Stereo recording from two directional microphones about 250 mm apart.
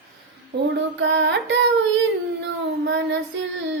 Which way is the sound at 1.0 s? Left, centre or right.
Right.